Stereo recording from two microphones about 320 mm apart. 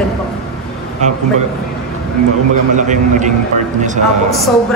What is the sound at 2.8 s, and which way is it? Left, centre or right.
Speech, right.